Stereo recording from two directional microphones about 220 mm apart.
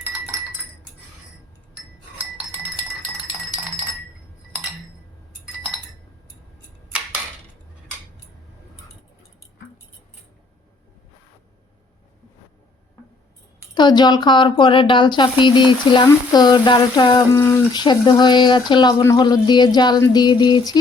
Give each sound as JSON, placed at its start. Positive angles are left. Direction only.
{"t": 13.7, "sound": "speech", "side_deg": 20}